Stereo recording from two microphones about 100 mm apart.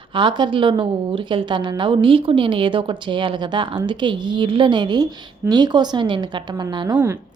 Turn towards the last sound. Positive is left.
turn(degrees=-25)  # may be behind; listen again after turning